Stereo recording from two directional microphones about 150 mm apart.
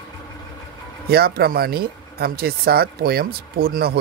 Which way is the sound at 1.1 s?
90° right.